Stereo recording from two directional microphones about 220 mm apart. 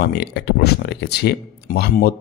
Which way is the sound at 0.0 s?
45° left (ahead or behind).